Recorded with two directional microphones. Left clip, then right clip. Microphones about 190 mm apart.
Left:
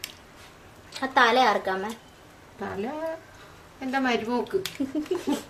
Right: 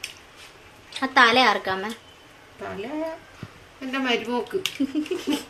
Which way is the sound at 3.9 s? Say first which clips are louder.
Right 1 dB; 60° left (ahead or behind).